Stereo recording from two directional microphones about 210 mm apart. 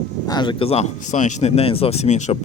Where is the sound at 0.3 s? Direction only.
20° left (ahead or behind).